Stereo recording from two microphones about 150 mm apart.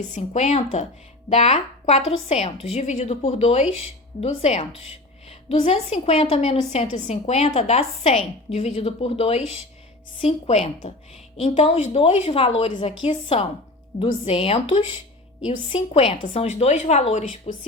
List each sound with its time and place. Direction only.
0.1 s a woman's voice: 50° left (ahead or behind)